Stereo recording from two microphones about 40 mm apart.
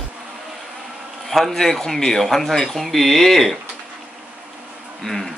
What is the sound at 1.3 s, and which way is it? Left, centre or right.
Speech, centre.